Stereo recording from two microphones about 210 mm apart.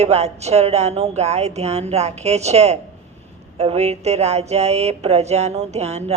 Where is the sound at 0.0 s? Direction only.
30° right (ahead or behind).